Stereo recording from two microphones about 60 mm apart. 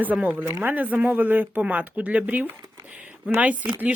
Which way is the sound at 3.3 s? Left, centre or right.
Right.